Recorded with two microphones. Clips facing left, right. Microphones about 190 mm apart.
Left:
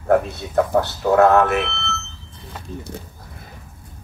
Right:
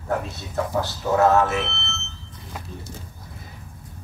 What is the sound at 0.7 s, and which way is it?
Speech, 60° left (ahead or behind).